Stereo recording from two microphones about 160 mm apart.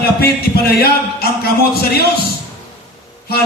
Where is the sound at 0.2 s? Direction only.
75° left (ahead or behind).